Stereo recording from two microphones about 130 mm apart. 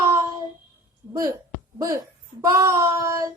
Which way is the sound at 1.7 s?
30° right (ahead or behind).